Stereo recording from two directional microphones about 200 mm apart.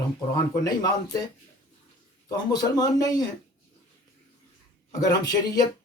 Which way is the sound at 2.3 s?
20° left (ahead or behind).